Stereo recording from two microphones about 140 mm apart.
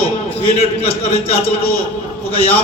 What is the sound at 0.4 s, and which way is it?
Speech, 50° left (ahead or behind).